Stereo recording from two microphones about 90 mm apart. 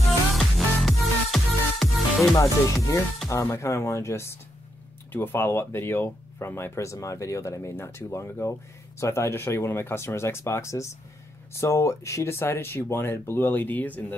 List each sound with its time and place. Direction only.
0.3 s music: centre (ahead or behind)
2.3 s speech: 40° left (ahead or behind); by 14.0 s 20° left (ahead or behind)